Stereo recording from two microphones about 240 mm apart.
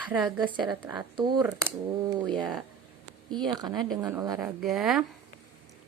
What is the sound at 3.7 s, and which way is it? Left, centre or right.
Speech, centre.